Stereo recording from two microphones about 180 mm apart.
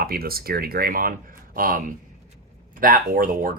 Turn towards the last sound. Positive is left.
turn(degrees=-50)  # may be behind; listen again after turning